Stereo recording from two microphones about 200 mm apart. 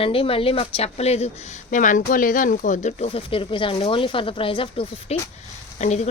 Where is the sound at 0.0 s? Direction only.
30° left (ahead or behind).